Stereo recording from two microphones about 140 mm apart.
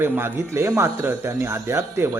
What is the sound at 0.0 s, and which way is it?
Speech, 15° right (ahead or behind).